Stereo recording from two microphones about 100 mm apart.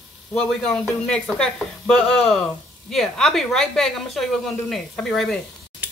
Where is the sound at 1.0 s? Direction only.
10° left (ahead or behind).